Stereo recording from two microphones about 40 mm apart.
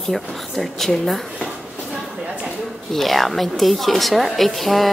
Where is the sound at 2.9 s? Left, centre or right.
Centre.